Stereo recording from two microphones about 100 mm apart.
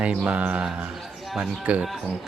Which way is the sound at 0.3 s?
15° right (ahead or behind).